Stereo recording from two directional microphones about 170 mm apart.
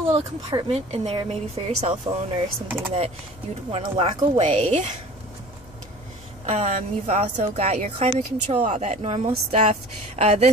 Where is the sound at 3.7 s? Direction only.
35° right (ahead or behind).